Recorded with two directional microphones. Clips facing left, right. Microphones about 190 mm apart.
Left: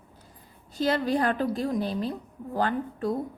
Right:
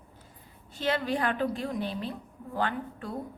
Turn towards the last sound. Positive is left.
turn(degrees=40)  # may be behind; listen again after turning